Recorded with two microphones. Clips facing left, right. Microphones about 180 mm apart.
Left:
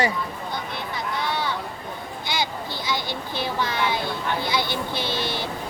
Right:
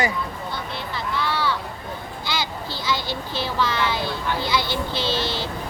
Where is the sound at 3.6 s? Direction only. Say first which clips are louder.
Right 3 dB; 20° left (ahead or behind).